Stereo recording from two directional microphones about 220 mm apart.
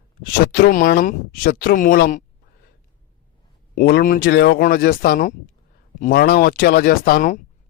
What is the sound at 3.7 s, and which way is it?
Speech, 45° left (ahead or behind).